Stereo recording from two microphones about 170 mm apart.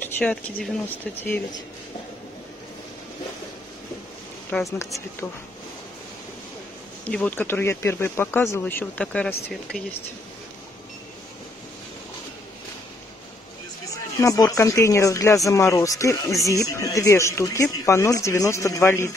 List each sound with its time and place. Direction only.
0.2 s speech: 5° left (ahead or behind)
4.5 s speech: 5° left (ahead or behind)
7.1 s speech: 10° left (ahead or behind)
14.1 s speech: 20° left (ahead or behind)